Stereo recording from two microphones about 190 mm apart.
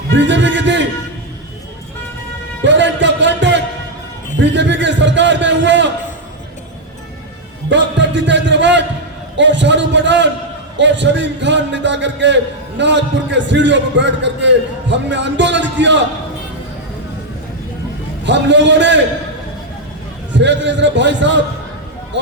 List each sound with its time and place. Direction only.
0.2 s a man's voice: 70° right (ahead or behind)
2.6 s music: 70° right (ahead or behind)
4.4 s a man's voice: 70° right (ahead or behind)
7.7 s a man's voice: 70° right (ahead or behind)
18.3 s a man's voice: 70° right (ahead or behind)
20.3 s a man's voice: 70° right (ahead or behind)